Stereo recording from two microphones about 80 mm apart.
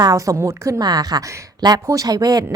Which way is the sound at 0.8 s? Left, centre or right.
Right.